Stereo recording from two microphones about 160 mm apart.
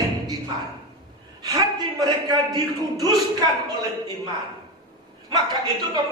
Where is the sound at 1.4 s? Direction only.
25° right (ahead or behind).